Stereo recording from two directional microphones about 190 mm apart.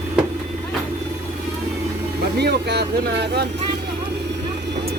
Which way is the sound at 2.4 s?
60° right (ahead or behind).